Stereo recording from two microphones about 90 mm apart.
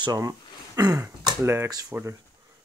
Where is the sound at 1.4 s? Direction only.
30° right (ahead or behind).